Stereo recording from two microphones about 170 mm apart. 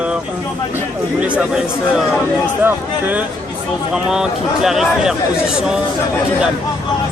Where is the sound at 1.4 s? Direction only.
5° right (ahead or behind).